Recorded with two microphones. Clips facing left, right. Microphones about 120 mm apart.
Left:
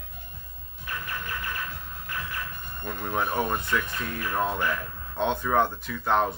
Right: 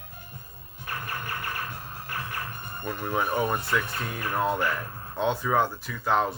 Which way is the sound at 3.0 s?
5° right (ahead or behind).